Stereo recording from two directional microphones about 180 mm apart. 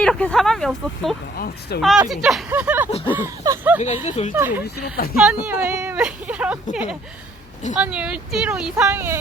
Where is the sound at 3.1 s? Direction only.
10° right (ahead or behind).